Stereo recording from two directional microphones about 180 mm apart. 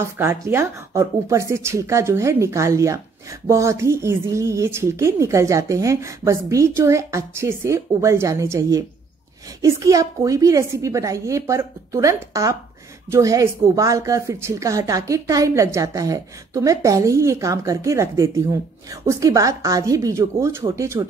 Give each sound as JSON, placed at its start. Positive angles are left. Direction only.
{"t": 0.0, "sound": "speech", "side_deg": -15}